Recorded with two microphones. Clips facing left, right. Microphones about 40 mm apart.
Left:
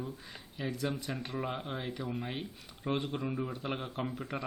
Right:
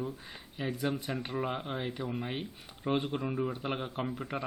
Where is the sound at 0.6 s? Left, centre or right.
Centre.